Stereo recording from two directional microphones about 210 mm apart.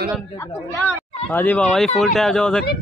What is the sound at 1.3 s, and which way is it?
Speech, 10° left (ahead or behind).